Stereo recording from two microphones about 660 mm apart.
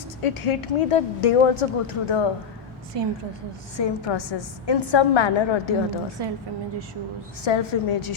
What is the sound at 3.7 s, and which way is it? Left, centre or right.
A woman's voice, left.